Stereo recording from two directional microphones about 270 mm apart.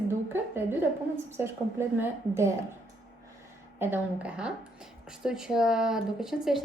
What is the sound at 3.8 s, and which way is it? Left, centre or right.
Speech, centre.